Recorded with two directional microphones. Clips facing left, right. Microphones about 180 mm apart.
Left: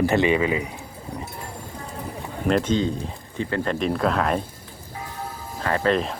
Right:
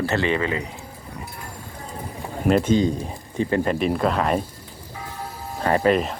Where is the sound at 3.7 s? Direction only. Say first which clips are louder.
Right 1 dB; 5° right (ahead or behind).